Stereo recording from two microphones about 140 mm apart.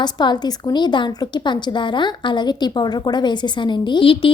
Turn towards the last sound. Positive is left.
turn(degrees=35)  # may be behind; listen again after turning